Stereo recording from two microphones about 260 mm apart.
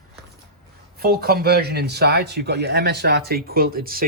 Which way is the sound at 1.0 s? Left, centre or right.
Right.